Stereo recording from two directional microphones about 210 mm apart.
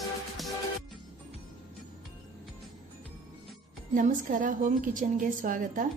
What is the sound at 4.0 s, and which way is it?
A woman's voice, 40° right (ahead or behind).